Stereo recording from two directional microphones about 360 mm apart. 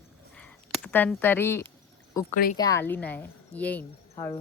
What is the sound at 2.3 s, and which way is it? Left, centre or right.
Speech, left.